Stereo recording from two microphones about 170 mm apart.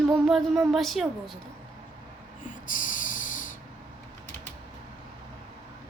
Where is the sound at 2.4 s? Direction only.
50° left (ahead or behind).